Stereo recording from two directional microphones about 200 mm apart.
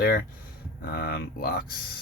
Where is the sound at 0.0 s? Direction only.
50° left (ahead or behind).